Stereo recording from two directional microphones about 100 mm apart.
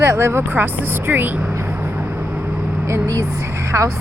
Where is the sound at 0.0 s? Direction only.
25° right (ahead or behind).